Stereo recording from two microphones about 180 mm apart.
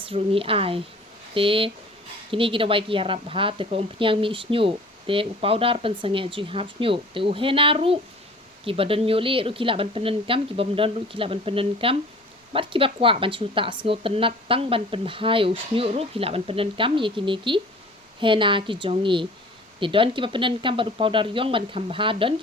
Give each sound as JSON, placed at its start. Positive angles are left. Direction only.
{"t": 0.0, "sound": "a woman's voice", "side_deg": -30}